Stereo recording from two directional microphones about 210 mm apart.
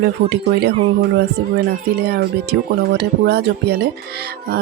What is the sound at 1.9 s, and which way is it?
Speech, 50° right (ahead or behind).